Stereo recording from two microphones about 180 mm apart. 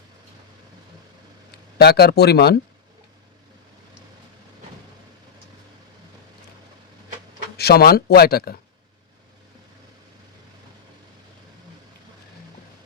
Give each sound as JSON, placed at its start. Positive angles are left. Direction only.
{"t": 1.8, "sound": "speech", "side_deg": 65}
{"t": 7.5, "sound": "speech", "side_deg": 60}